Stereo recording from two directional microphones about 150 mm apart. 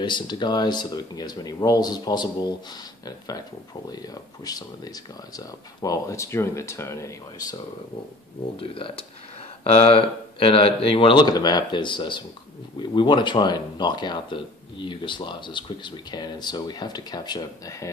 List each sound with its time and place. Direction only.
0.0 s speech: 30° left (ahead or behind)
8.5 s speech: 35° left (ahead or behind)